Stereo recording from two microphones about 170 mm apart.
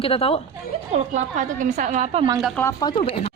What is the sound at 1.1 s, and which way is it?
A woman's voice, 50° right (ahead or behind).